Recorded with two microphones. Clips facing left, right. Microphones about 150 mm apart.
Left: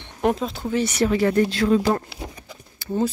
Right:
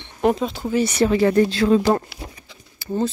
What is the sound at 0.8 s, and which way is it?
Speech, 25° right (ahead or behind).